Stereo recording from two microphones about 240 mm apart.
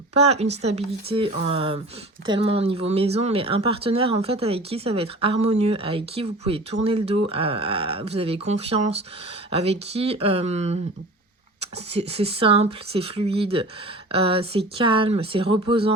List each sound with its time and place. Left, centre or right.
0.6 s speech: right